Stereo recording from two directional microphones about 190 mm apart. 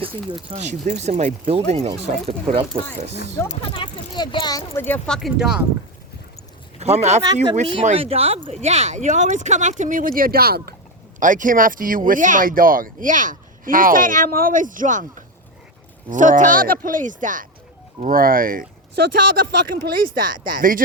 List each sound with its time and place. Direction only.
0.0 s speech: 30° right (ahead or behind)
0.5 s speech: 40° right (ahead or behind)
3.5 s speech: 25° left (ahead or behind); by 5.6 s 5° right (ahead or behind)
6.7 s speech: 35° right (ahead or behind)
16.0 s speech: 45° right (ahead or behind)